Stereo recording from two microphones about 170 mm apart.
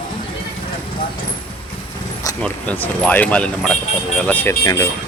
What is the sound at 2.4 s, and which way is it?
Speech, 5° left (ahead or behind).